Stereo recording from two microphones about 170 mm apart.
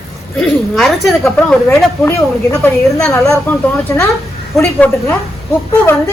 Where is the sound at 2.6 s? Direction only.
5° left (ahead or behind).